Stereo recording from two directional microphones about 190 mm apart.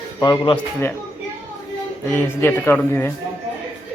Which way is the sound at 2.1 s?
10° left (ahead or behind).